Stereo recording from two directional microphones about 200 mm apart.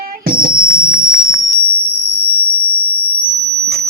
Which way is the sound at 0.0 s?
45° right (ahead or behind).